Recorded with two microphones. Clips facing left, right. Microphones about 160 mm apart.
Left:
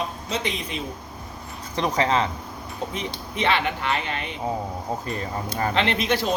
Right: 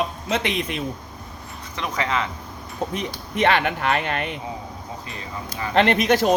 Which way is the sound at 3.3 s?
50° right (ahead or behind).